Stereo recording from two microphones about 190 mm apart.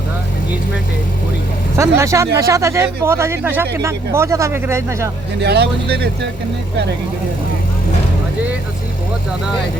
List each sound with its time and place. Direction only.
1.7 s speech: 15° right (ahead or behind)
5.4 s speech: 60° right (ahead or behind)